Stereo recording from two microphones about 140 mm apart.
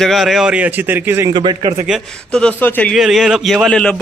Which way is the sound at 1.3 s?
30° right (ahead or behind).